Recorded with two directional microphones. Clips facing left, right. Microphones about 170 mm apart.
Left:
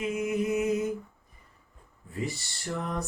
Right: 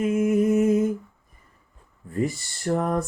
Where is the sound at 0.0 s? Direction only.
45° right (ahead or behind).